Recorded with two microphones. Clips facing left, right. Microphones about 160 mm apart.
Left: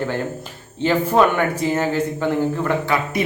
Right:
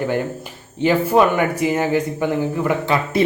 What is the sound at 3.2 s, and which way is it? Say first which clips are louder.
Speech: right 7 dB; 30° right (ahead or behind).